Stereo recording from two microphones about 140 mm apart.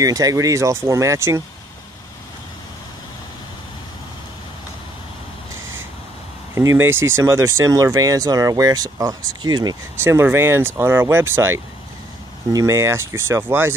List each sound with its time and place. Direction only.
0.0 s speech: 25° right (ahead or behind)
6.5 s speech: 20° right (ahead or behind)
10.0 s speech: 15° right (ahead or behind)